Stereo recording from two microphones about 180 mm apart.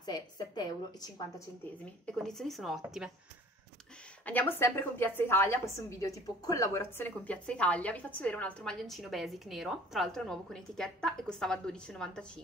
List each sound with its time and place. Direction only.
0.0 s a woman's voice: 25° left (ahead or behind)
2.2 s speech: centre (ahead or behind)
4.3 s a woman's voice: 10° left (ahead or behind)